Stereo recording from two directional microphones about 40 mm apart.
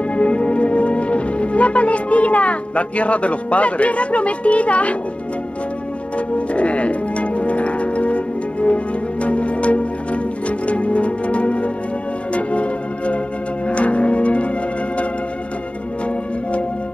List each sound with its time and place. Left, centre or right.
0.1 s music: left
6.1 s music: left